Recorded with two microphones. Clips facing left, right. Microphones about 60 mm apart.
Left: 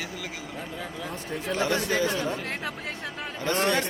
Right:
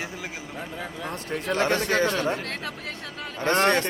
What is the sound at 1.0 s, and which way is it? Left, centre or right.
Speech, right.